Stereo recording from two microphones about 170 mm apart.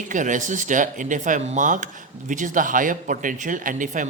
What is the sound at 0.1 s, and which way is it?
Speech, 50° right (ahead or behind).